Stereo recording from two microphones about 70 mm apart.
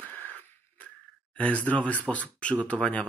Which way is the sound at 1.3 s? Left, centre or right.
Centre.